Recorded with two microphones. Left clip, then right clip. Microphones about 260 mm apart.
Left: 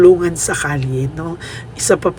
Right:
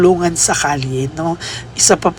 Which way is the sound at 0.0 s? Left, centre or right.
Centre.